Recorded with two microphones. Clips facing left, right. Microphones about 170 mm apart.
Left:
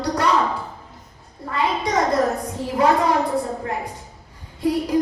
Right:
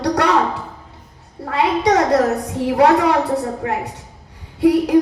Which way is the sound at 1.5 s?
75° right (ahead or behind).